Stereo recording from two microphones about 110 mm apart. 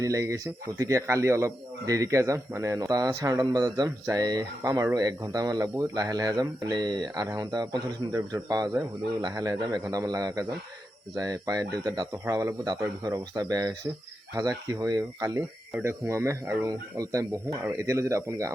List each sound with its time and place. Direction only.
0.0 s a man's voice: 30° right (ahead or behind)